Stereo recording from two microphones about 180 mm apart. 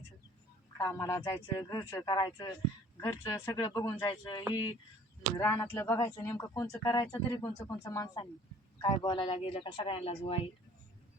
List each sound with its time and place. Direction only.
0.8 s speech: 15° left (ahead or behind); by 10.5 s 35° left (ahead or behind)